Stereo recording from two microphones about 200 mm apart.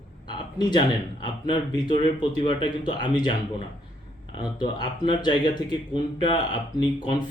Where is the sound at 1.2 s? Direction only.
20° left (ahead or behind).